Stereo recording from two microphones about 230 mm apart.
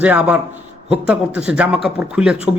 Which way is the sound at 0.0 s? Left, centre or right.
Centre.